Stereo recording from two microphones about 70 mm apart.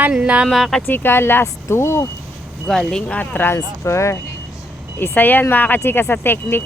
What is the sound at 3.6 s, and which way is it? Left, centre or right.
Speech, left.